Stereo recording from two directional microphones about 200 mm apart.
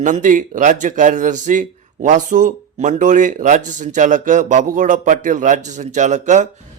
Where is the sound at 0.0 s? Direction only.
40° right (ahead or behind).